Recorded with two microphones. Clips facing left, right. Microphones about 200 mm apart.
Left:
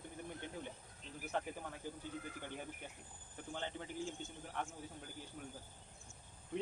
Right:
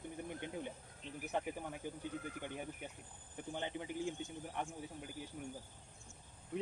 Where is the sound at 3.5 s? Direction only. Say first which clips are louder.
Right 3 dB; 15° right (ahead or behind).